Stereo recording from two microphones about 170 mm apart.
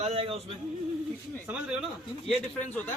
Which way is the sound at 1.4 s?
10° right (ahead or behind).